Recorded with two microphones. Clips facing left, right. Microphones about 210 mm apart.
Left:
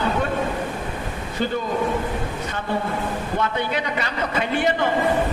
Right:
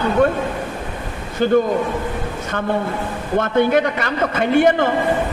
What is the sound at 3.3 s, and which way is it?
A man's voice, 50° right (ahead or behind).